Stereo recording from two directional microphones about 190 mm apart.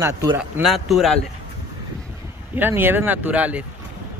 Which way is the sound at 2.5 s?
10° right (ahead or behind).